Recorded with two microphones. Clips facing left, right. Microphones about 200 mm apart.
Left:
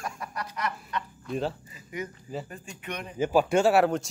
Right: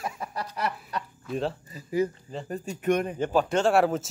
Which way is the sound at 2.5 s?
40° right (ahead or behind).